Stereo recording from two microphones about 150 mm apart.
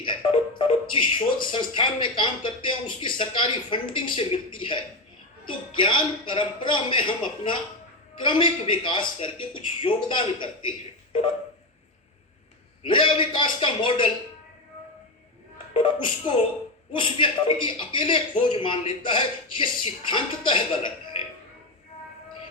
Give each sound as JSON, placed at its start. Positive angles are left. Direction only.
{"t": 0.0, "sound": "a man's voice", "side_deg": 35}
{"t": 12.8, "sound": "a man's voice", "side_deg": 35}
{"t": 15.7, "sound": "a man's voice", "side_deg": 35}